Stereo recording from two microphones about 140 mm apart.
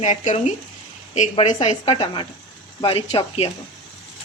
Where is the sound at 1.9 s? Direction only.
35° left (ahead or behind).